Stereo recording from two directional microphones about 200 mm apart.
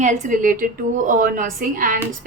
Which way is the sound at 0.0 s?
35° right (ahead or behind).